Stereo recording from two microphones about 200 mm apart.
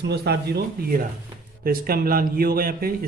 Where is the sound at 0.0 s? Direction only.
55° right (ahead or behind).